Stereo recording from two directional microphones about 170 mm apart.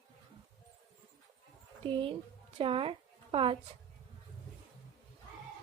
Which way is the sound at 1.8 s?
30° right (ahead or behind).